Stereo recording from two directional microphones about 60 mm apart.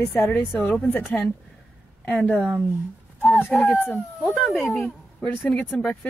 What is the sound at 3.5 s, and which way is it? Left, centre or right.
Speech, left.